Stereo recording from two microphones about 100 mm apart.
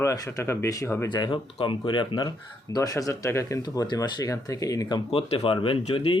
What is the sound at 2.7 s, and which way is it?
Speech, 35° left (ahead or behind).